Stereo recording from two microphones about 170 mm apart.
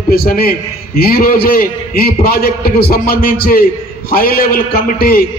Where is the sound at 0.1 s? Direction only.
65° left (ahead or behind).